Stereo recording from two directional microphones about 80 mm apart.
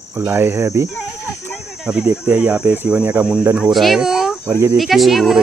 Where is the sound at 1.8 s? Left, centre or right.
Centre.